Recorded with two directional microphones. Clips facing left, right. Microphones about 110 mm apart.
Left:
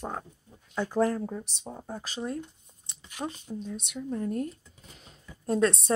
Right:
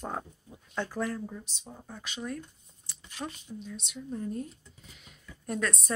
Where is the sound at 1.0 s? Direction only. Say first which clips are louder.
Left 7 dB; 45° left (ahead or behind); by 3.3 s 25° left (ahead or behind).